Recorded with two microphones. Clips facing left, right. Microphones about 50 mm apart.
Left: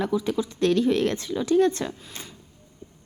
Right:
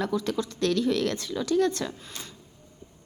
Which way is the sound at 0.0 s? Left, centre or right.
Centre.